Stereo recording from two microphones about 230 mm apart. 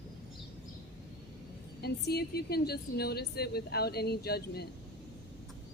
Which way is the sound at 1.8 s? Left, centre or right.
Left.